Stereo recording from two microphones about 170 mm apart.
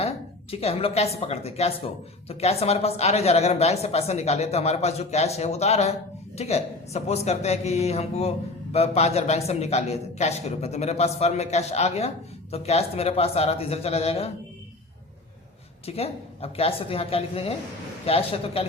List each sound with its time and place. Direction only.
0.5 s a man's voice: 35° left (ahead or behind)
15.9 s a man's voice: 35° left (ahead or behind)